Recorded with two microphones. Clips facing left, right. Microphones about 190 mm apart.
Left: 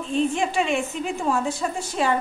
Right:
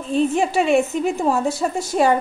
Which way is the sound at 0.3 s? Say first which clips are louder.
Right 6 dB; 40° right (ahead or behind).